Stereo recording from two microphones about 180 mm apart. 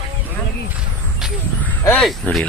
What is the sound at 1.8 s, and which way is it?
Speech, 5° left (ahead or behind).